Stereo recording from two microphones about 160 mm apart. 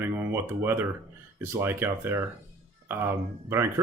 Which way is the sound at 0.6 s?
15° right (ahead or behind).